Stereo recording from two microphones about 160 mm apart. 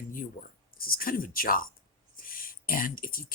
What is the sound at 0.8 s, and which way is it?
Speech, 65° left (ahead or behind).